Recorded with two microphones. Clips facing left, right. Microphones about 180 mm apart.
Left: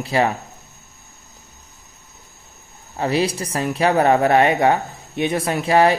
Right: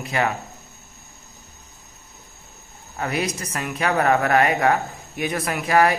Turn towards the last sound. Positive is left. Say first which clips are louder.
# left 3 dB
turn(degrees=30)  # may be behind; listen again after turning